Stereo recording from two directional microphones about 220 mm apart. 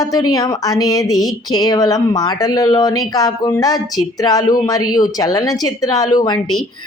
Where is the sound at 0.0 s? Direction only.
15° left (ahead or behind).